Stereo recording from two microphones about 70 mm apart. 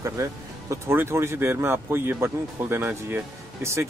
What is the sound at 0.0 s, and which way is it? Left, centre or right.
Speech, right.